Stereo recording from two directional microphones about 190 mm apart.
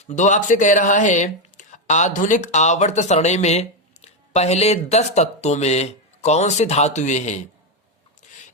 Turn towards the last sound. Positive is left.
turn(degrees=40)  # may be behind; listen again after turning